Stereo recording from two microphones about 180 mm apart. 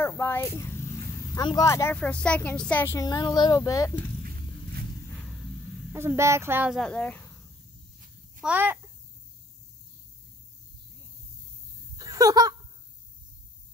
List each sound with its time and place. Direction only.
0.0 s a woman's voice: 10° left (ahead or behind)
2.0 s a woman's voice: 5° left (ahead or behind)
3.1 s speech: 25° left (ahead or behind)
5.9 s speech: 15° right (ahead or behind)
6.8 s speech: 5° left (ahead or behind)
8.4 s a child's voice: 10° right (ahead or behind)
12.0 s a sound: 20° right (ahead or behind)